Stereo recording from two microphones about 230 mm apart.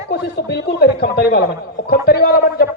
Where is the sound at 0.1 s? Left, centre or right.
Left.